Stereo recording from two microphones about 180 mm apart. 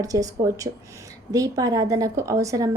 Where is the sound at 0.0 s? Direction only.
20° right (ahead or behind).